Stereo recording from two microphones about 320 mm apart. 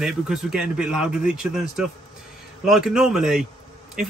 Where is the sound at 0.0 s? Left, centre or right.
Centre.